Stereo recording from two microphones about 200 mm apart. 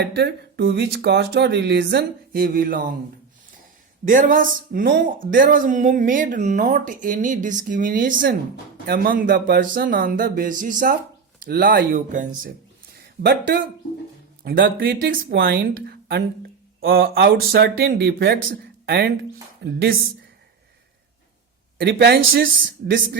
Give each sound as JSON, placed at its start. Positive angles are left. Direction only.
{"t": 0.0, "sound": "speech", "side_deg": -55}
{"t": 4.0, "sound": "speech", "side_deg": -40}
{"t": 13.0, "sound": "speech", "side_deg": -50}
{"t": 21.8, "sound": "speech", "side_deg": -55}